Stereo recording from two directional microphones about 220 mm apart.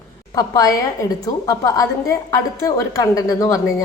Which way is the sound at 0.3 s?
15° left (ahead or behind).